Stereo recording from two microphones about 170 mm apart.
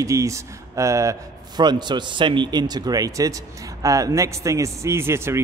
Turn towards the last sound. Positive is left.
turn(degrees=-15)  # may be behind; listen again after turning